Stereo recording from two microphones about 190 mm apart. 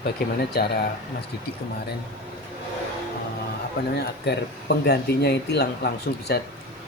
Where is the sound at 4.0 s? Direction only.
60° left (ahead or behind).